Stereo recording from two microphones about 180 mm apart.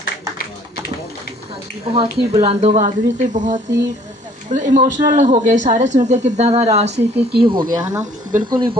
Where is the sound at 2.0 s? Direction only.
30° right (ahead or behind).